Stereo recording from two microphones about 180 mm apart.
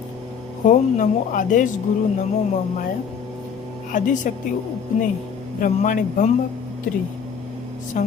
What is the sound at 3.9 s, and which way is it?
Speech, 45° left (ahead or behind).